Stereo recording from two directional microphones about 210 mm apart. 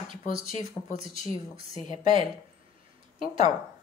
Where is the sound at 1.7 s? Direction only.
35° left (ahead or behind).